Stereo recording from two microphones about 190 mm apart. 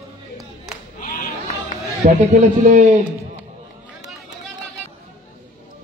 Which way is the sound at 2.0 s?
40° right (ahead or behind).